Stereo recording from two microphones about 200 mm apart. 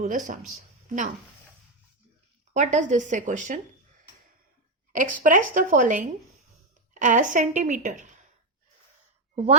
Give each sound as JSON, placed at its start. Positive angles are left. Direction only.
{"t": 0.0, "sound": "a woman's voice", "side_deg": -40}
{"t": 2.5, "sound": "a woman's voice", "side_deg": -35}
{"t": 4.9, "sound": "a woman's voice", "side_deg": -40}
{"t": 9.3, "sound": "speech", "side_deg": -30}